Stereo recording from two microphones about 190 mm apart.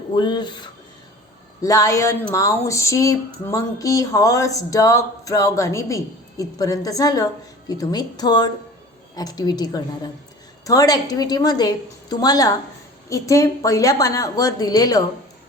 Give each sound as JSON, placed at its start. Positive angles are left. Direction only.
{"t": 0.1, "sound": "a woman's voice", "side_deg": 25}